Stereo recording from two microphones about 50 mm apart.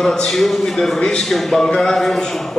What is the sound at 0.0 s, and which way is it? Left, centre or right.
Speech, centre.